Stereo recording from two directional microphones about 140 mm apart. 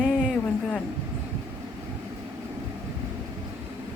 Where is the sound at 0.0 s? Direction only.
5° left (ahead or behind).